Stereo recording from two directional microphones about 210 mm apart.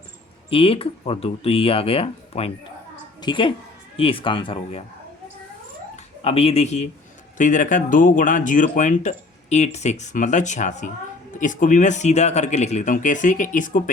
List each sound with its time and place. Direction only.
0.5 s a woman's voice: 25° left (ahead or behind)
6.2 s speech: 25° left (ahead or behind)